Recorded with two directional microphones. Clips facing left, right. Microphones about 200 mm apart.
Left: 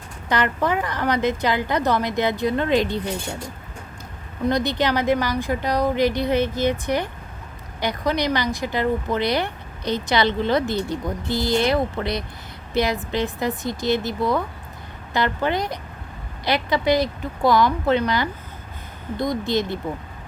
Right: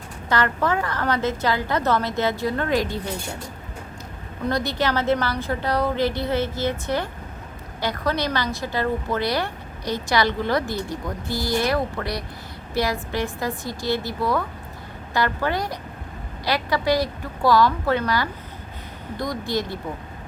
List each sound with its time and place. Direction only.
0.3 s a woman's voice: 20° left (ahead or behind)
4.4 s a woman's voice: 20° left (ahead or behind)